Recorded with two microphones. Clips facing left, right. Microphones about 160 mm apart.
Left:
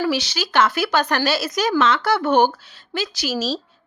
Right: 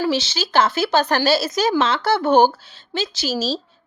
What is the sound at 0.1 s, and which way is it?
Speech, 25° right (ahead or behind).